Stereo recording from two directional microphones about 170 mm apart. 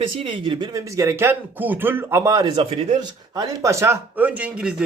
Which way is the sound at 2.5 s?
40° right (ahead or behind).